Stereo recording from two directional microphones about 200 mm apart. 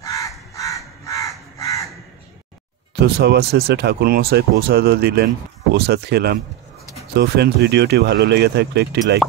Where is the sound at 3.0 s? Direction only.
55° right (ahead or behind).